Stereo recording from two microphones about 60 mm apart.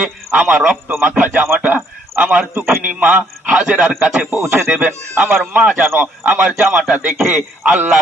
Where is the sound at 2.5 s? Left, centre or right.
Right.